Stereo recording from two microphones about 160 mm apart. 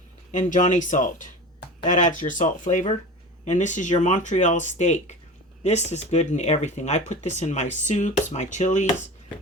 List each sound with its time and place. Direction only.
0.3 s speech: 50° left (ahead or behind)